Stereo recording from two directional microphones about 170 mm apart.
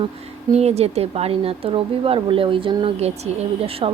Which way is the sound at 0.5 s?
40° right (ahead or behind).